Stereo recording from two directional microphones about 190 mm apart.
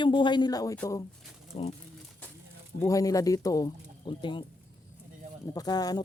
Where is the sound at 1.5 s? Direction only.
35° left (ahead or behind).